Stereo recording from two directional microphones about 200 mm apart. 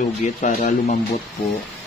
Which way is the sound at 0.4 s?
40° left (ahead or behind).